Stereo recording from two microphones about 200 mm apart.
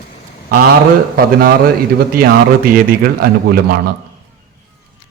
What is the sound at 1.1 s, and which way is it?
A man's voice, 50° right (ahead or behind).